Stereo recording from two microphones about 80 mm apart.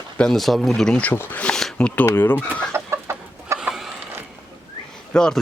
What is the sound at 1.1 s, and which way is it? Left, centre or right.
Speech, left.